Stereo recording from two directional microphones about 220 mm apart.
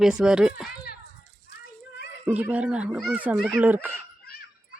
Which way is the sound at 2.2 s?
5° right (ahead or behind).